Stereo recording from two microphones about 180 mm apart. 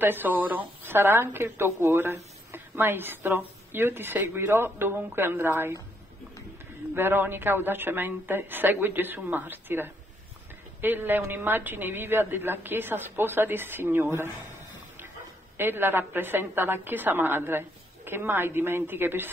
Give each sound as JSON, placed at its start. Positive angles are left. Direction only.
{"t": 0.0, "sound": "a woman's voice", "side_deg": -10}
{"t": 7.0, "sound": "a woman's voice", "side_deg": -10}
{"t": 15.5, "sound": "a woman's voice", "side_deg": -10}